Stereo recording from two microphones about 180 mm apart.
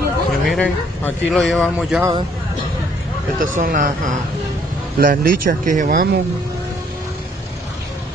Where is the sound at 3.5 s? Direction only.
50° right (ahead or behind).